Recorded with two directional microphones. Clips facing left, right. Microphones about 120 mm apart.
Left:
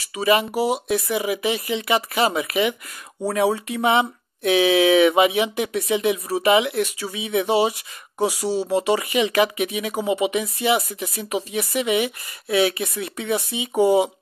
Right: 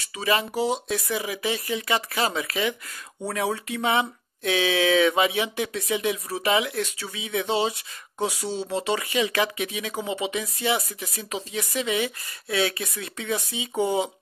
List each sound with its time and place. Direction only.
0.0 s speech: 15° left (ahead or behind)